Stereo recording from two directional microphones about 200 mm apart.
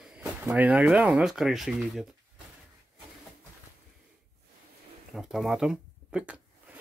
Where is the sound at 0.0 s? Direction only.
5° right (ahead or behind).